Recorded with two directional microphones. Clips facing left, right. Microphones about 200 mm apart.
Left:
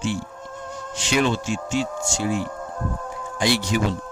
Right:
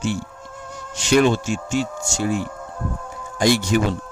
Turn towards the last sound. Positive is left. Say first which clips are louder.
# right 4 dB
turn(degrees=-45)  # may be behind; listen again after turning